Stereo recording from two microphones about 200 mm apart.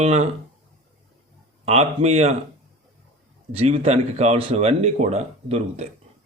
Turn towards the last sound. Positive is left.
turn(degrees=-30)  # may be behind; listen again after turning